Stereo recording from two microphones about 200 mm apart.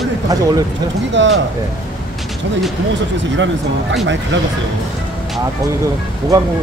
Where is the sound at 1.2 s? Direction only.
65° right (ahead or behind).